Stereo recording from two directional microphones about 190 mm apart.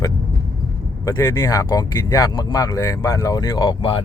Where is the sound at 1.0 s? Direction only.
15° left (ahead or behind).